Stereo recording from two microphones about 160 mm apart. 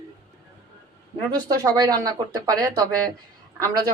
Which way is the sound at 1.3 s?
25° right (ahead or behind).